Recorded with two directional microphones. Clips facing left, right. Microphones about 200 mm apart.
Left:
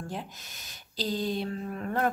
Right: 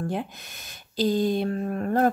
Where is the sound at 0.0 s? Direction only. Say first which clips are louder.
Right 8 dB; 60° right (ahead or behind).